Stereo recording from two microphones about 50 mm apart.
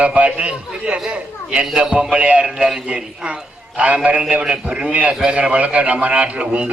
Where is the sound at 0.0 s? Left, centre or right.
Right.